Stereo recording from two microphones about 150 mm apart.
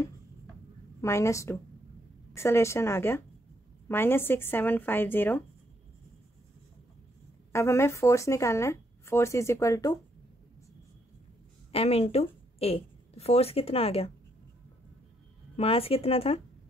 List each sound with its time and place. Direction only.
1.0 s a woman's voice: 20° left (ahead or behind)
7.5 s speech: 15° left (ahead or behind)
11.7 s speech: 40° left (ahead or behind)
15.5 s speech: 40° left (ahead or behind)